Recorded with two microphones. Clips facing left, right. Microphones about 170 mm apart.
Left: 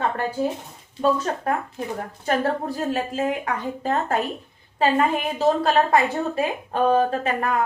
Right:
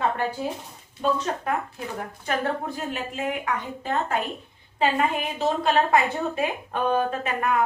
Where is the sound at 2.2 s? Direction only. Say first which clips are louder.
Left 4 dB; 40° left (ahead or behind).